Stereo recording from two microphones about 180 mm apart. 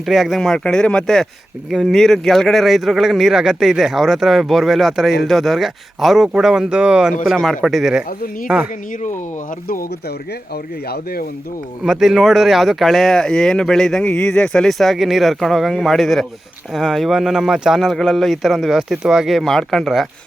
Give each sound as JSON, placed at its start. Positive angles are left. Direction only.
{"t": 0.0, "sound": "speech", "side_deg": 0}
{"t": 10.5, "sound": "speech", "side_deg": 60}
{"t": 11.8, "sound": "speech", "side_deg": 0}